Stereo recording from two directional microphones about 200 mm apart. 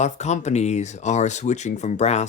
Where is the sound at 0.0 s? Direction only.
35° left (ahead or behind).